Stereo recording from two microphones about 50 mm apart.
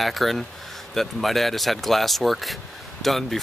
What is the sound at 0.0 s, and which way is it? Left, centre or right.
Speech, centre.